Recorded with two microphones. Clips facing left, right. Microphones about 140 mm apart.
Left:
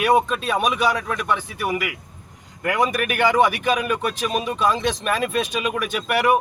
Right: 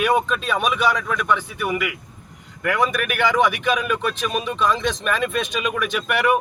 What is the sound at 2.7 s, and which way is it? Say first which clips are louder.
Speech: left 1 dB; 15° left (ahead or behind).